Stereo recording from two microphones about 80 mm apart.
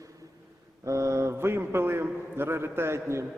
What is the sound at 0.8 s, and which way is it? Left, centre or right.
A man's voice, right.